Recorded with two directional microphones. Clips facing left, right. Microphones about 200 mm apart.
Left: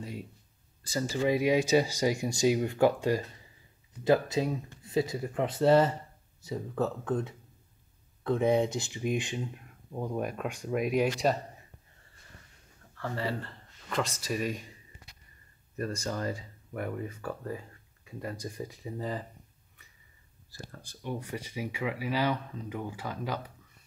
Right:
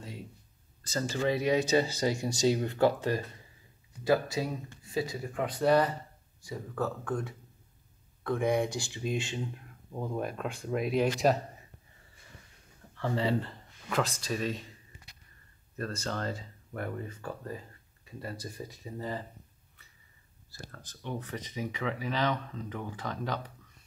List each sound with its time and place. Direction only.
0.8 s speech: 10° left (ahead or behind)
13.0 s speech: 20° right (ahead or behind)
13.8 s speech: 5° right (ahead or behind)
14.2 s speech: 10° left (ahead or behind)
15.8 s speech: 10° left (ahead or behind)
20.5 s speech: 15° left (ahead or behind)